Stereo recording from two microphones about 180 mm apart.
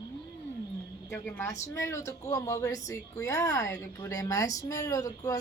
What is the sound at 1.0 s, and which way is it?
A woman's voice, 15° left (ahead or behind).